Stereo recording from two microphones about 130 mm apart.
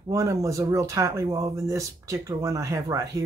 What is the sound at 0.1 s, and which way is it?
Speech, 25° right (ahead or behind).